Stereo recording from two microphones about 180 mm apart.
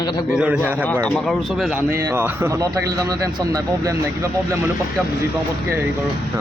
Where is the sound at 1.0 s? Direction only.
Centre (ahead or behind).